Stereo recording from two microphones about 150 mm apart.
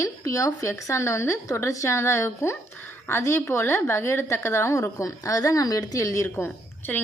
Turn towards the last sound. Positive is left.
turn(degrees=15)  # may be behind; listen again after turning